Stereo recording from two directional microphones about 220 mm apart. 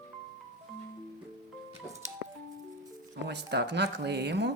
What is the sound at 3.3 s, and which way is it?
Speech, 50° right (ahead or behind).